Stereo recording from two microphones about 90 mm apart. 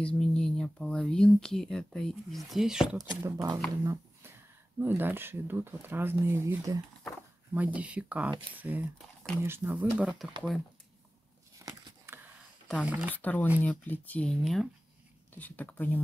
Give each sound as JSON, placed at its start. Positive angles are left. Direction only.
{"t": 0.0, "sound": "speech", "side_deg": 10}
{"t": 3.0, "sound": "speech", "side_deg": -45}
{"t": 3.8, "sound": "a sound", "side_deg": -35}
{"t": 4.7, "sound": "speech", "side_deg": -25}
{"t": 7.5, "sound": "speech", "side_deg": -15}
{"t": 10.0, "sound": "speech", "side_deg": 0}
{"t": 12.8, "sound": "speech", "side_deg": -15}
{"t": 13.1, "sound": "speech", "side_deg": 20}
{"t": 14.4, "sound": "speech", "side_deg": 0}
{"t": 15.3, "sound": "speech", "side_deg": 20}